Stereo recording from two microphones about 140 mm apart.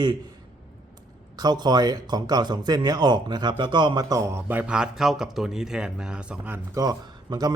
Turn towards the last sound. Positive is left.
turn(degrees=-25)  # may be behind; listen again after turning